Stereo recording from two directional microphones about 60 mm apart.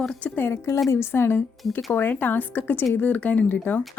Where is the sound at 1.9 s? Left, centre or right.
Left.